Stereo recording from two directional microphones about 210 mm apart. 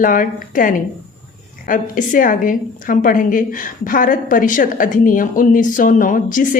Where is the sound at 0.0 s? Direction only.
40° left (ahead or behind).